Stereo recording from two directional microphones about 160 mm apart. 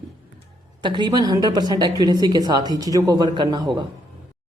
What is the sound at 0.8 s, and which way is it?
A woman's voice, 30° right (ahead or behind).